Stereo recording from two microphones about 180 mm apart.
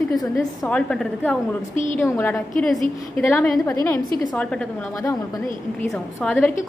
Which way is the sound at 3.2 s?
15° left (ahead or behind).